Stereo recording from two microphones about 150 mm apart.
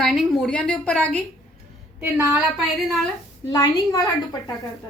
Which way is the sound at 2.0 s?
10° right (ahead or behind).